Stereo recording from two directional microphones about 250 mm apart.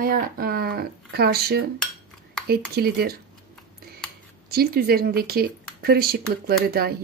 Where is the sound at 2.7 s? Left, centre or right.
Right.